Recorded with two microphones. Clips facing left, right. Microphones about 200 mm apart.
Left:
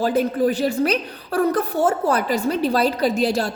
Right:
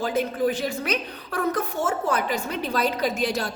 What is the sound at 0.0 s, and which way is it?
A woman's voice, 35° left (ahead or behind).